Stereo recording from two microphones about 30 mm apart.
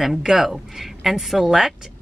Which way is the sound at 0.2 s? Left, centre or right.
Centre.